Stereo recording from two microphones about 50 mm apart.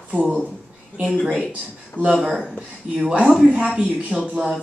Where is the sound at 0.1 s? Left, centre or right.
Right.